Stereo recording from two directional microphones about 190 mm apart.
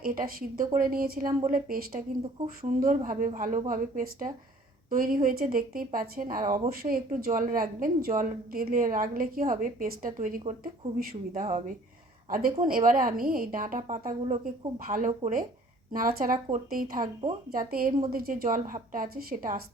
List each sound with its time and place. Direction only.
0.0 s speech: 50° right (ahead or behind)